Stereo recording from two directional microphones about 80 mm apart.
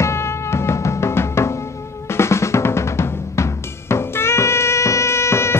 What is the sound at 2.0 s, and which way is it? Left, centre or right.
Drum, left.